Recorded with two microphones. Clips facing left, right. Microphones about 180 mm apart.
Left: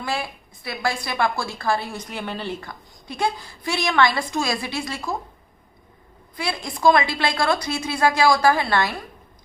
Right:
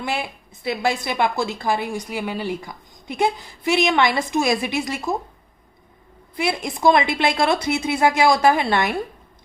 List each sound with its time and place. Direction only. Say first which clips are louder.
0.0 s a woman's voice: right 1 dB; 20° right (ahead or behind)
6.3 s a woman's voice: right 5 dB; 20° right (ahead or behind)